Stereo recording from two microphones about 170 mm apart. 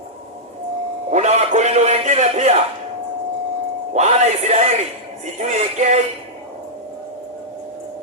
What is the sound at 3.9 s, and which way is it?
A man's voice, 40° right (ahead or behind).